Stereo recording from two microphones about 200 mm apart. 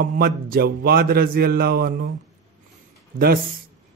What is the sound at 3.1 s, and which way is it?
Speech, 45° right (ahead or behind).